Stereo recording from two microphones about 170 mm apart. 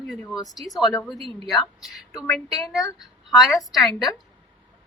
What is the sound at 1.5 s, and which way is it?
A woman's voice, centre (ahead or behind).